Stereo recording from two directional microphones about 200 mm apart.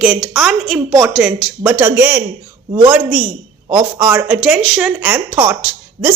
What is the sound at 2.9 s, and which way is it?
A woman's voice, 5° right (ahead or behind).